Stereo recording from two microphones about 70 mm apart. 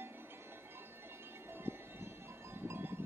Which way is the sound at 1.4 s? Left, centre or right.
Right.